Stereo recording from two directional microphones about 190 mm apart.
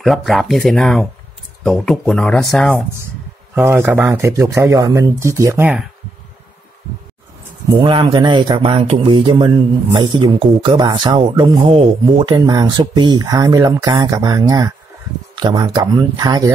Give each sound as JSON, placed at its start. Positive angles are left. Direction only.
{"t": 0.0, "sound": "speech", "side_deg": 0}
{"t": 3.5, "sound": "speech", "side_deg": -10}
{"t": 7.8, "sound": "speech", "side_deg": -25}